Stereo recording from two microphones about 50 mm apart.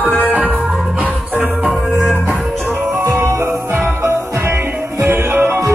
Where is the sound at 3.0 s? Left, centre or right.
Right.